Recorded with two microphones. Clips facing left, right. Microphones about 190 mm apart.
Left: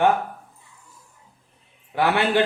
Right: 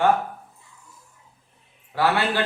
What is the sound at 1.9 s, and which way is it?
Speech, 20° left (ahead or behind).